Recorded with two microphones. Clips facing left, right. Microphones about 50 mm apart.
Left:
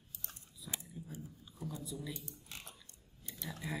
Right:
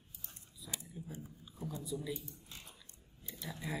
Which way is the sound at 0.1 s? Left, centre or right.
Left.